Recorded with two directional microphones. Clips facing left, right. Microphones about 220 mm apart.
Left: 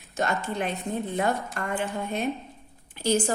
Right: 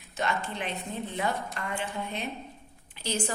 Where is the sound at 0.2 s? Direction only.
45° left (ahead or behind).